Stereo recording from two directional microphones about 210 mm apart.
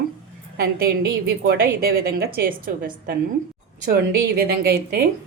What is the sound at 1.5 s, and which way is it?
A woman's voice, 50° right (ahead or behind).